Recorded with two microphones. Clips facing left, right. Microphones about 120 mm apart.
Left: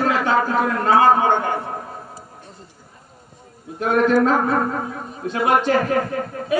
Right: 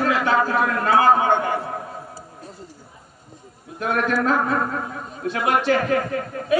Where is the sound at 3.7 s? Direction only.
30° left (ahead or behind).